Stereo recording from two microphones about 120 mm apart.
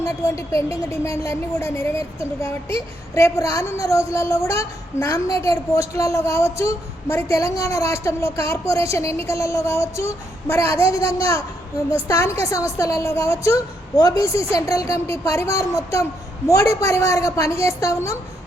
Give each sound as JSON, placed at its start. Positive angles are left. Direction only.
{"t": 0.0, "sound": "speech", "side_deg": 25}